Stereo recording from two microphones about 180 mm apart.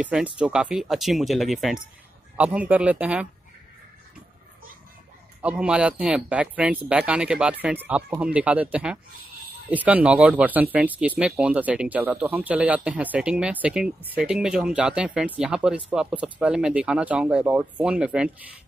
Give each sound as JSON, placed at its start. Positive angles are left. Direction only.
{"t": 0.0, "sound": "speech", "side_deg": -5}
{"t": 5.4, "sound": "speech", "side_deg": -5}